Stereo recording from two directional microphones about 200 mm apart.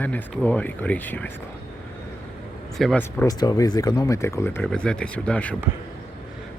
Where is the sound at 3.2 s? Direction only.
20° left (ahead or behind).